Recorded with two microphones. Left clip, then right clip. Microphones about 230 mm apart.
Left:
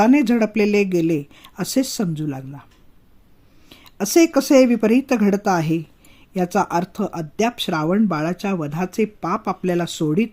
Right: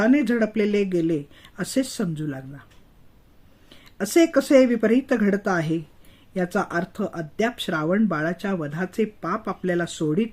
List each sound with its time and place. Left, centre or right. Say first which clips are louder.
0.0 s speech: left 4 dB; left
3.7 s speech: left 4 dB; left